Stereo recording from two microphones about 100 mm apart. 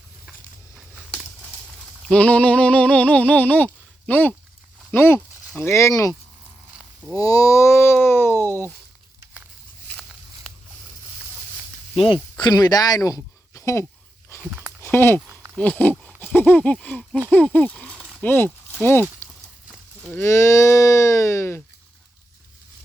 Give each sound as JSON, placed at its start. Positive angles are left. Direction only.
{"t": 2.0, "sound": "a sound", "side_deg": 15}
{"t": 4.9, "sound": "speech", "side_deg": 25}
{"t": 7.2, "sound": "speech", "side_deg": 35}
{"t": 11.9, "sound": "speech", "side_deg": 55}
{"t": 14.3, "sound": "a sound", "side_deg": 30}
{"t": 14.8, "sound": "speech", "side_deg": 25}
{"t": 20.1, "sound": "speech", "side_deg": 30}